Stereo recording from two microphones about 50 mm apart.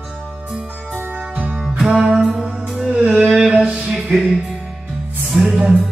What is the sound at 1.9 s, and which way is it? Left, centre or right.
Music, centre.